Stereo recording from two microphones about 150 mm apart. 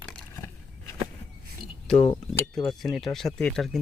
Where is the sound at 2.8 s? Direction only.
Centre (ahead or behind).